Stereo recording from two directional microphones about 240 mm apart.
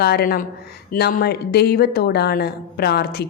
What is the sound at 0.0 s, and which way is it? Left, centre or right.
A woman's voice, left.